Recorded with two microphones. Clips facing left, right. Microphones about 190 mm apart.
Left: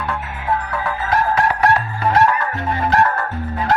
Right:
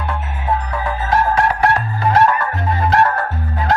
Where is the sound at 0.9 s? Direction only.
30° right (ahead or behind).